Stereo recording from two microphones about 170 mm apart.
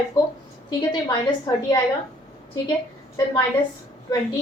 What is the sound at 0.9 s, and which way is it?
Speech, 25° left (ahead or behind).